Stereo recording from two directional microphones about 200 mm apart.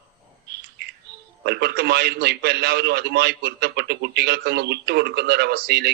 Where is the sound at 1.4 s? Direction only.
55° right (ahead or behind).